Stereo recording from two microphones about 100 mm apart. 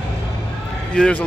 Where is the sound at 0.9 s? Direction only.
10° left (ahead or behind).